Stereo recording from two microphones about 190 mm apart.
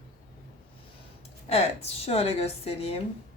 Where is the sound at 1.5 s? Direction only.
35° left (ahead or behind).